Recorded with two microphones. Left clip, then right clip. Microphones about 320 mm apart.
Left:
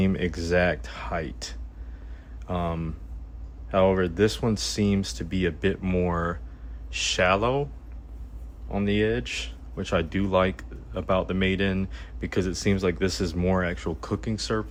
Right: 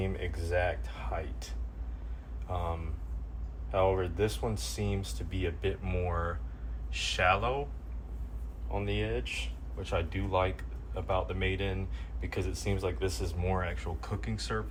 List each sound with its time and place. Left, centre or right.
0.3 s speech: left
8.7 s speech: left